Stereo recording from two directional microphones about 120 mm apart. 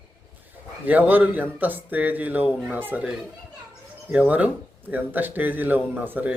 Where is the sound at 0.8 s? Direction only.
15° right (ahead or behind).